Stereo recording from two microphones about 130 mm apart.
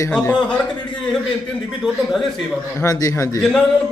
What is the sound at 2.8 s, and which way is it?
Speech, 25° left (ahead or behind).